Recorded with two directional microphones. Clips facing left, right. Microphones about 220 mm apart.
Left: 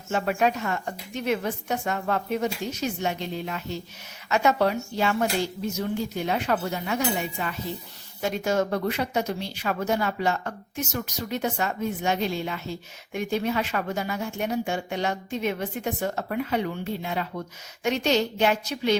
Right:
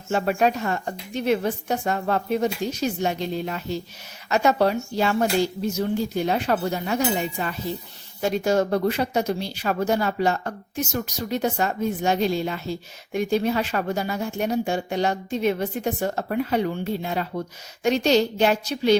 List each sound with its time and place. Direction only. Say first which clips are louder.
0.1 s a woman's voice: right 3 dB; 35° right (ahead or behind)